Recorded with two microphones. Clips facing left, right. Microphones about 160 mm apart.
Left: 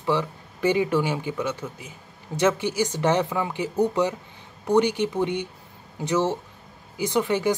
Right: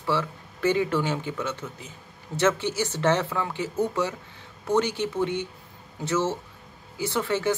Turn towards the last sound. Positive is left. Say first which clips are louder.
# left 3 dB
turn(degrees=15)  # may be behind; listen again after turning